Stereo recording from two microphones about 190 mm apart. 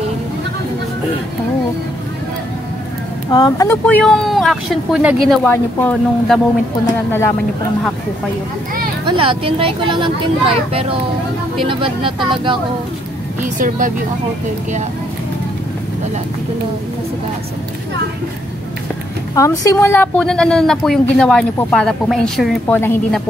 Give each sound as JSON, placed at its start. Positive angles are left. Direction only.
{"t": 3.3, "sound": "a woman's voice", "side_deg": 20}
{"t": 9.0, "sound": "speech", "side_deg": -25}
{"t": 13.4, "sound": "a woman's voice", "side_deg": -45}
{"t": 19.3, "sound": "a woman's voice", "side_deg": 15}